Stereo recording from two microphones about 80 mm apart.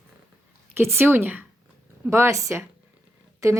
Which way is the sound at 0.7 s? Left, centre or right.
Right.